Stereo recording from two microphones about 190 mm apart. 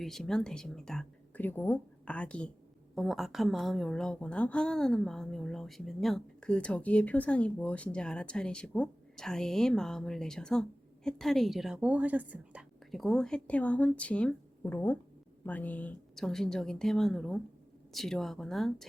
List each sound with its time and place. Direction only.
0.0 s a woman's voice: centre (ahead or behind)